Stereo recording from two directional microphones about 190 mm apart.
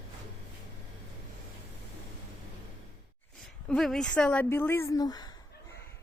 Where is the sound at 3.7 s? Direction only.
5° left (ahead or behind).